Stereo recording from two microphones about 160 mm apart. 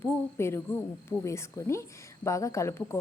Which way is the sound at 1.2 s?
15° left (ahead or behind).